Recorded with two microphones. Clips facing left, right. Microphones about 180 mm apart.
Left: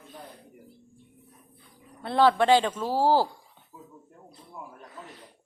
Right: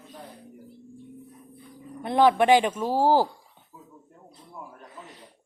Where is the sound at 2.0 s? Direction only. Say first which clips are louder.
Right 2 dB; 15° right (ahead or behind).